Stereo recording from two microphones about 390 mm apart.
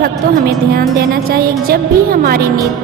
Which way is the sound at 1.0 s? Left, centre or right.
Right.